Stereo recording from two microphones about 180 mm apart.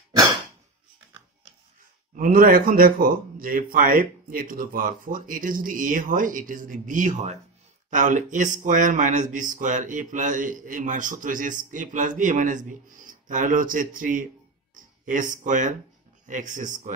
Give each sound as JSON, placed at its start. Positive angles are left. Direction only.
{"t": 0.1, "sound": "cough", "side_deg": -20}
{"t": 2.1, "sound": "speech", "side_deg": -50}